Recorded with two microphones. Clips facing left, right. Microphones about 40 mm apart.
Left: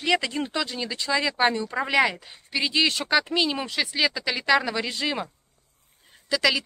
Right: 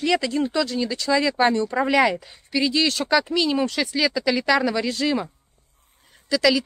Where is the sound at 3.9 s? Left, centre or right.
Left.